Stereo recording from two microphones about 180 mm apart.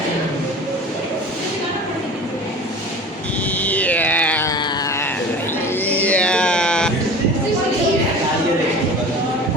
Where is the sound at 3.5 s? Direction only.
10° left (ahead or behind).